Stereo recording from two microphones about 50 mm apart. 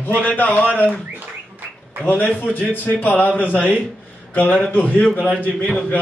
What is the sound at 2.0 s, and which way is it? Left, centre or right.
A man's voice, left.